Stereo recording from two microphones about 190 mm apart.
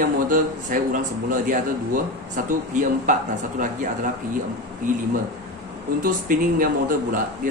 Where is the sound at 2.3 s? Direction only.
40° right (ahead or behind).